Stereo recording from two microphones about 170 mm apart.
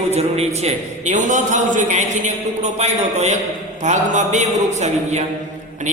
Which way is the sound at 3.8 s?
45° right (ahead or behind).